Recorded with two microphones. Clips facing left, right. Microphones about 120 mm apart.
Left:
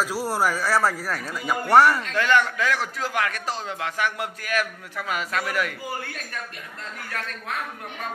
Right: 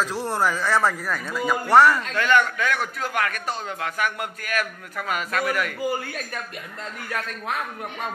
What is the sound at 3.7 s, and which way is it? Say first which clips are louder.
Speech: even; 25° left (ahead or behind).